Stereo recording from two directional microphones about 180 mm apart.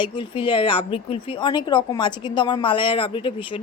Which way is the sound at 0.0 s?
25° left (ahead or behind).